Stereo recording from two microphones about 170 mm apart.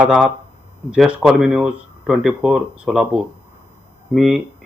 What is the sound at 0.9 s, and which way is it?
Speech, 5° right (ahead or behind).